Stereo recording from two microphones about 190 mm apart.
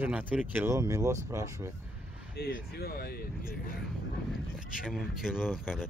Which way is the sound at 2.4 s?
55° left (ahead or behind).